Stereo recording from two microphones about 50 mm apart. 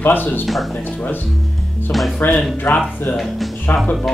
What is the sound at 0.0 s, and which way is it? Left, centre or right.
Speech, left.